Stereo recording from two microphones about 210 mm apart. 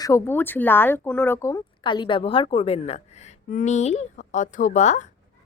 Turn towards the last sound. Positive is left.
turn(degrees=35)  # may be behind; listen again after turning